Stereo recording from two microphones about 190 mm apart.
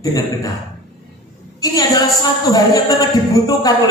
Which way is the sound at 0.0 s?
20° left (ahead or behind).